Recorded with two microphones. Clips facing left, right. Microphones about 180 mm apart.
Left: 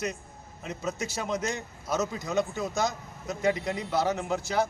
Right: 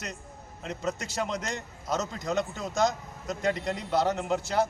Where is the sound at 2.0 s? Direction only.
5° left (ahead or behind).